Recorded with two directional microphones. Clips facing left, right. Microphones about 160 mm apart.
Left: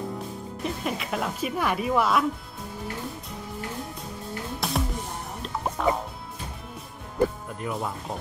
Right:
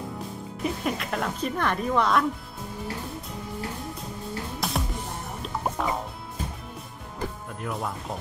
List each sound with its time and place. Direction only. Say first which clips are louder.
0.7 s speech: right 1 dB; centre (ahead or behind)
4.6 s music: left 3 dB; centre (ahead or behind)
7.6 s speech: left 1 dB; centre (ahead or behind)